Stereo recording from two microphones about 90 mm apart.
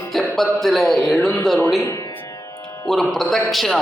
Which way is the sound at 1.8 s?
35° left (ahead or behind).